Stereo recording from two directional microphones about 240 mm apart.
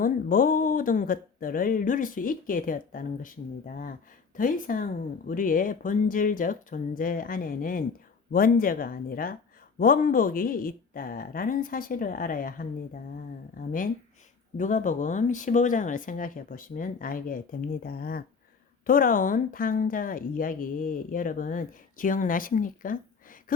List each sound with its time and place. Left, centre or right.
0.0 s a woman's voice: left